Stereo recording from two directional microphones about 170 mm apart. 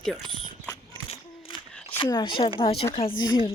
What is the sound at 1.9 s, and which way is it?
A woman's voice, 15° left (ahead or behind).